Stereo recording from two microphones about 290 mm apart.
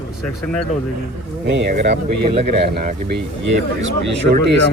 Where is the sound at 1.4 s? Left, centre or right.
Right.